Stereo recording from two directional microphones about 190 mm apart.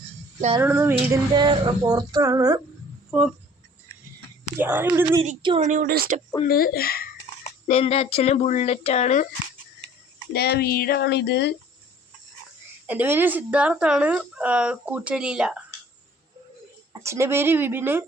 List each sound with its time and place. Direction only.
0.6 s speech: 10° right (ahead or behind)
1.0 s a sound: 20° right (ahead or behind)
3.1 s speech: 5° right (ahead or behind)
4.5 s speech: 10° right (ahead or behind)
5.4 s a sound: 25° right (ahead or behind)
5.6 s speech: 45° right (ahead or behind)
6.5 s speech: 50° left (ahead or behind)
7.7 s speech: 30° left (ahead or behind)
10.3 s speech: 60° left (ahead or behind)
12.9 s speech: 10° right (ahead or behind)
16.9 s speech: 15° right (ahead or behind)